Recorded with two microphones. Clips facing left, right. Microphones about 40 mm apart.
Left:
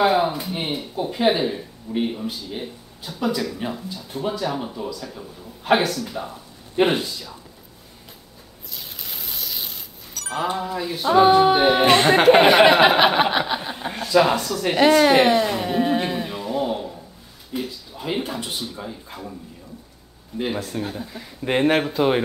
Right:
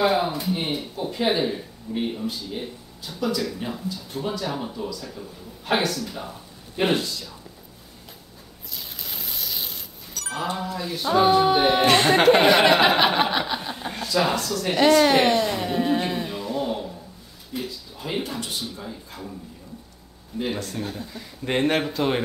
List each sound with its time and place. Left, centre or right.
0.0 s speech: centre
3.2 s speech: centre
8.7 s music: centre
14.6 s a sound: centre
17.6 s speech: centre
20.3 s speech: centre